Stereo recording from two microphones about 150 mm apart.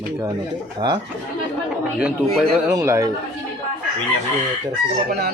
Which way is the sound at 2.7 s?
20° right (ahead or behind).